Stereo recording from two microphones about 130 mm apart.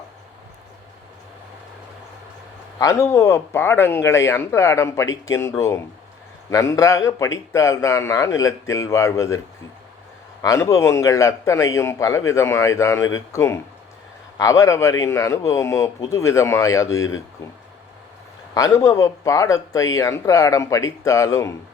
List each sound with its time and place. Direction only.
2.7 s a man's voice: 25° left (ahead or behind)
10.4 s a man's voice: 25° left (ahead or behind)
18.5 s a man's voice: 25° left (ahead or behind)